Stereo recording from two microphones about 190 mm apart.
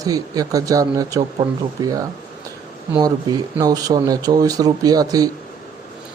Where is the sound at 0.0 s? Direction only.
20° right (ahead or behind).